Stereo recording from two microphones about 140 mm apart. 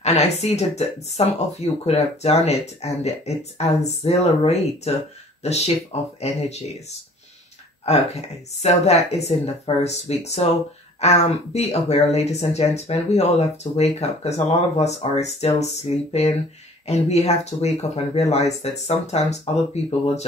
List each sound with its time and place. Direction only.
0.0 s speech: 50° left (ahead or behind)